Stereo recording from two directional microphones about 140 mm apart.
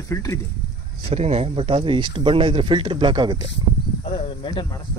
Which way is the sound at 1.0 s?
45° right (ahead or behind).